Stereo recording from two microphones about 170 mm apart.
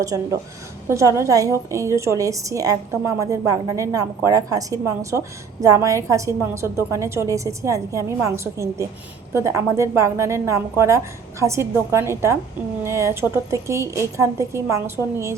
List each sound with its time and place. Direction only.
0.0 s a woman's voice: 20° right (ahead or behind)